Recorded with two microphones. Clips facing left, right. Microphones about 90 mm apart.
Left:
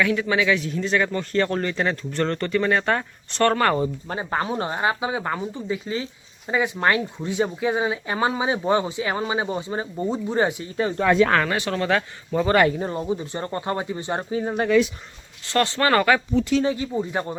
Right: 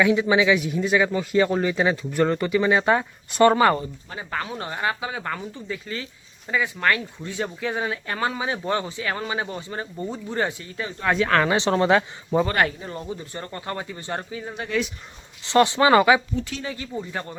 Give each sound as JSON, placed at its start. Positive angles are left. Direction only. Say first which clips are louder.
{"t": 0.0, "sound": "a man's voice", "louder": "right 3 dB", "side_deg": -15}
{"t": 4.1, "sound": "speech", "louder": "left 1 dB", "side_deg": 30}
{"t": 11.0, "sound": "speech", "louder": "left 4 dB", "side_deg": 90}
{"t": 11.4, "sound": "speech", "louder": "right 4 dB", "side_deg": -25}
{"t": 12.5, "sound": "speech", "louder": "left 5 dB", "side_deg": 30}
{"t": 14.3, "sound": "speech", "louder": "left 9 dB", "side_deg": 35}
{"t": 15.4, "sound": "a man's voice", "louder": "right 4 dB", "side_deg": -15}
{"t": 16.6, "sound": "speech", "louder": "left 7 dB", "side_deg": 20}